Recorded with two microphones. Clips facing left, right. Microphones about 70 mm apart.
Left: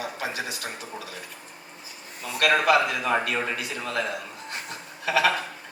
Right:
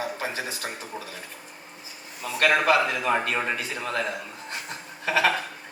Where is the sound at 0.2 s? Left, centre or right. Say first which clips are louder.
Even; right.